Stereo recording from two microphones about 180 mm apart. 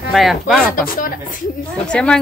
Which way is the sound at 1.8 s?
5° left (ahead or behind).